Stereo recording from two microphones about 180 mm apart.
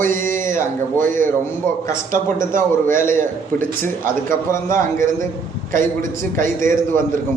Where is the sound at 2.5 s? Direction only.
45° right (ahead or behind).